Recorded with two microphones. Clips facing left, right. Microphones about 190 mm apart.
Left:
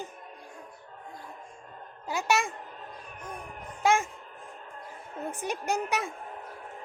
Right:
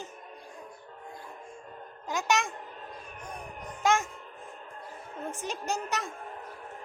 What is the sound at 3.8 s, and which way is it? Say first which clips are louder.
Speech: left 2 dB; 10° left (ahead or behind).